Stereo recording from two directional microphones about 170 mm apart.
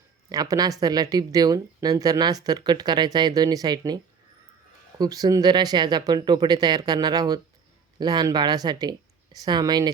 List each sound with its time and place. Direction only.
0.3 s speech: 20° right (ahead or behind)